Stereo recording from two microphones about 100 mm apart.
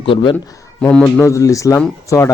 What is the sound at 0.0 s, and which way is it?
Speech, 60° left (ahead or behind).